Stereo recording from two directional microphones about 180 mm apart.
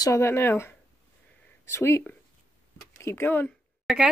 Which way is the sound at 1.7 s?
15° left (ahead or behind).